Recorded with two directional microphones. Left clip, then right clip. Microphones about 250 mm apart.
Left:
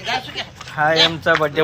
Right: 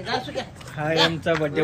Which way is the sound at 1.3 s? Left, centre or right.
Centre.